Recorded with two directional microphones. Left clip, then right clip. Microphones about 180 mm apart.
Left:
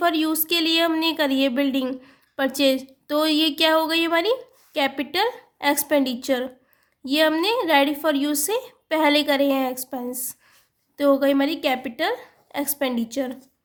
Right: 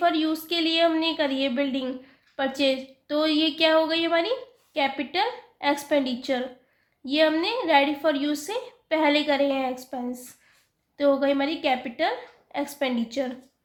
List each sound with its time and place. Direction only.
0.0 s a woman's voice: 50° left (ahead or behind)